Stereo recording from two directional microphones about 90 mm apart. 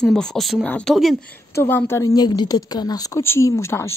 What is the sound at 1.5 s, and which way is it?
Speech, 25° left (ahead or behind).